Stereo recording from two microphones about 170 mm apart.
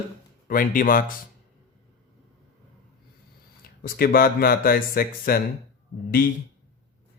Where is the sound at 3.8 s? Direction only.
60° left (ahead or behind).